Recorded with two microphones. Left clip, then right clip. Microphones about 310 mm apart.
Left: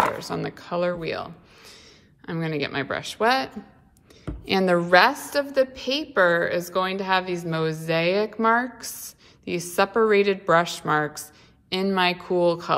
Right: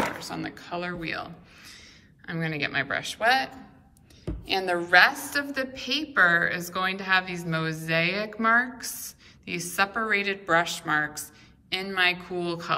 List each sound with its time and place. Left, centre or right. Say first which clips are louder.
0.2 s a woman's voice: left 5 dB; centre